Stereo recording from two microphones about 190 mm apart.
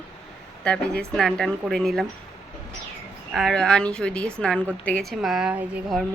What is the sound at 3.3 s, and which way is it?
Speech, centre (ahead or behind).